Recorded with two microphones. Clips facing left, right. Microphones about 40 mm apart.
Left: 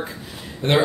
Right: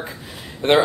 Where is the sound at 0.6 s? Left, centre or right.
Right.